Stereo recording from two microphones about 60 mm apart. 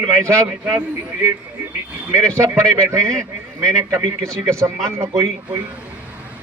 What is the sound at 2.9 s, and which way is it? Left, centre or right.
Speech, right.